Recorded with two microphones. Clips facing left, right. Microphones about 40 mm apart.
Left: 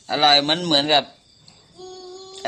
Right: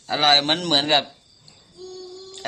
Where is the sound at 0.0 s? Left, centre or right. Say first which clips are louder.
Left 2 dB; centre.